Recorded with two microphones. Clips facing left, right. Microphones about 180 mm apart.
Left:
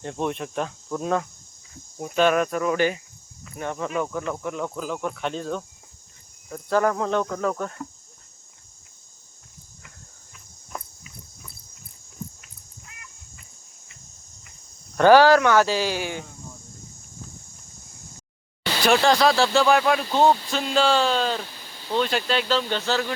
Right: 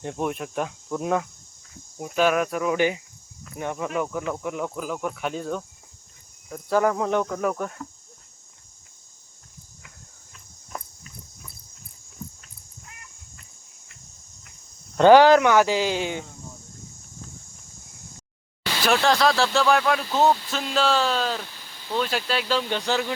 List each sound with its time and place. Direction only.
0.0 s speech: 10° right (ahead or behind)
14.9 s speech: 20° right (ahead or behind)
18.9 s speech: centre (ahead or behind); by 23.1 s 15° right (ahead or behind)